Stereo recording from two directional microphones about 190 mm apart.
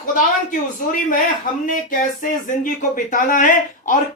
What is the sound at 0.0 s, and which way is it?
Speech, 45° left (ahead or behind).